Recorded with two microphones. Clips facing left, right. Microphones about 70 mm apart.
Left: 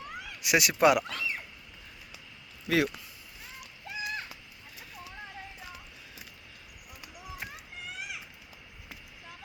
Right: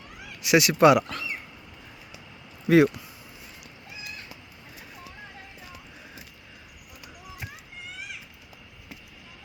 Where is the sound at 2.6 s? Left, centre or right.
Right.